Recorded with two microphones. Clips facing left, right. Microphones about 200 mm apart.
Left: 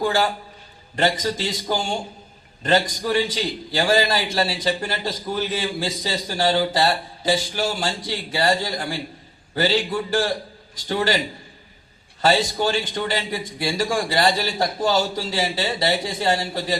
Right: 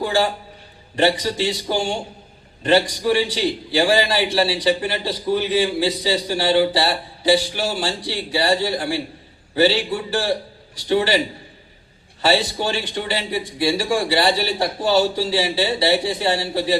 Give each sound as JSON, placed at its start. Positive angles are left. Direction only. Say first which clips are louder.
{"t": 0.0, "sound": "a man's voice", "louder": "right 1 dB", "side_deg": 45}
{"t": 12.2, "sound": "a man's voice", "louder": "even", "side_deg": 45}